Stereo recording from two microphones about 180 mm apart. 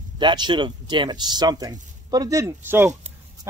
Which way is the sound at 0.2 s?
25° right (ahead or behind).